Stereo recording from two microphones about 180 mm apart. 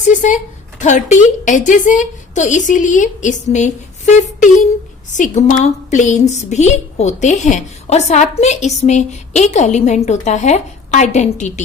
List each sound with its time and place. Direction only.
0.1 s a woman's voice: 45° left (ahead or behind)